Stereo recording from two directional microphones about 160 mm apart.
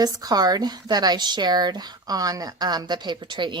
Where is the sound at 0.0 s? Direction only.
25° right (ahead or behind).